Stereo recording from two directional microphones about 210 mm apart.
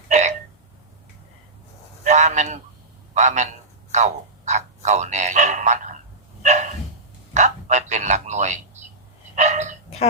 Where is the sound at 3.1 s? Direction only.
35° right (ahead or behind).